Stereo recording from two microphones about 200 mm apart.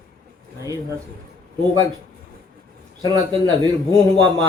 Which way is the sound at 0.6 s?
15° right (ahead or behind).